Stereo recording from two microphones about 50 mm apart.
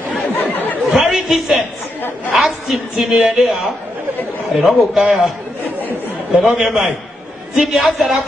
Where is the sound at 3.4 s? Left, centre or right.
Centre.